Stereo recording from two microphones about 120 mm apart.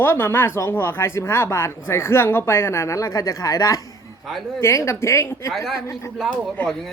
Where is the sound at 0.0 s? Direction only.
20° left (ahead or behind).